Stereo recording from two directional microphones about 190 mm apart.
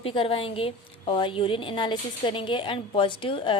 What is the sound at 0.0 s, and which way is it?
A woman's voice, 30° left (ahead or behind).